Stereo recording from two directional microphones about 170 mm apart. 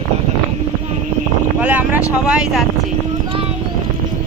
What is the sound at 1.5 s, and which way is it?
Vehicle, 10° right (ahead or behind).